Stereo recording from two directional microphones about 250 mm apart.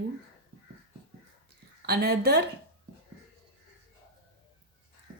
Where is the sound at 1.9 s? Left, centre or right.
Right.